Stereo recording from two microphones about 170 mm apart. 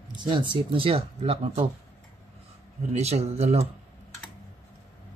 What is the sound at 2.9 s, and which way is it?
Speech, 40° right (ahead or behind).